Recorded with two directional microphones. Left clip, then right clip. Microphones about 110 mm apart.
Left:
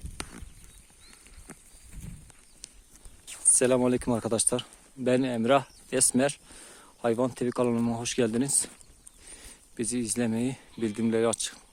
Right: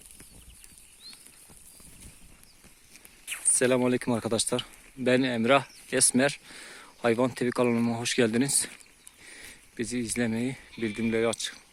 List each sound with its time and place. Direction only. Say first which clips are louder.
3.3 s speech: left 1 dB; 15° left (ahead or behind); by 6.6 s centre (ahead or behind)
6.6 s speech: even; 15° right (ahead or behind)
9.2 s a sound: right 4 dB; centre (ahead or behind)
9.7 s speech: even; 15° left (ahead or behind)